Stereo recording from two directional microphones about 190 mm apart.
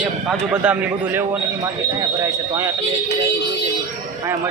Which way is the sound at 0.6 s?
10° right (ahead or behind).